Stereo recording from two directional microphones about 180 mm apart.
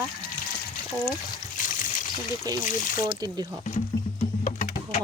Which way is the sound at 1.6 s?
45° left (ahead or behind).